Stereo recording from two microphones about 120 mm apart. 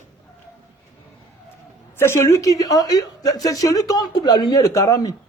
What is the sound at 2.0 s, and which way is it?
A woman's voice, 25° left (ahead or behind).